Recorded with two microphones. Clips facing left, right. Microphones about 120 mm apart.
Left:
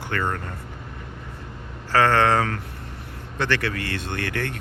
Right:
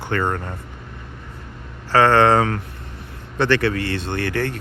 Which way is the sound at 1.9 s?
30° right (ahead or behind).